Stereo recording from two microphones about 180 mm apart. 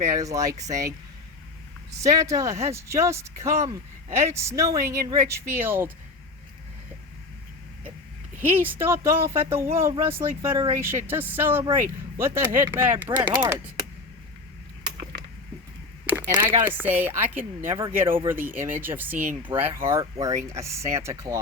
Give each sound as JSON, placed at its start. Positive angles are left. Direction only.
{"t": 0.1, "sound": "speech", "side_deg": -20}
{"t": 8.4, "sound": "speech", "side_deg": -10}
{"t": 16.0, "sound": "a sound", "side_deg": -15}
{"t": 16.6, "sound": "speech", "side_deg": -10}